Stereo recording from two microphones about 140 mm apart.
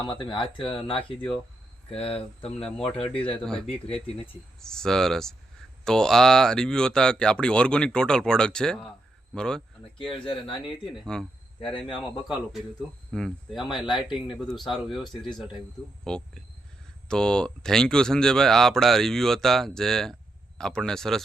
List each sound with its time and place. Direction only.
0.0 s speech: 35° left (ahead or behind)
3.4 s speech: 5° left (ahead or behind)
3.7 s speech: 45° left (ahead or behind)
4.6 s speech: 5° left (ahead or behind)
16.0 s speech: 5° left (ahead or behind)